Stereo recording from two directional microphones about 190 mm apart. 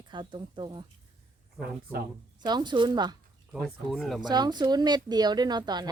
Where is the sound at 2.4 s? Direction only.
20° right (ahead or behind).